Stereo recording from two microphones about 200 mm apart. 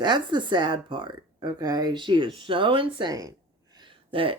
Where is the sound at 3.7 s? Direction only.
25° right (ahead or behind).